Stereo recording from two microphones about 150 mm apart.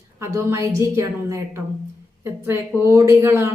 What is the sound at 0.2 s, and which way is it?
A woman's voice, 20° right (ahead or behind).